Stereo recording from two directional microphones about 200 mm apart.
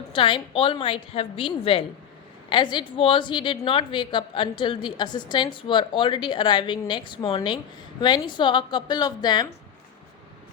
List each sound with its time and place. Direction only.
0.1 s a woman's voice: 25° left (ahead or behind)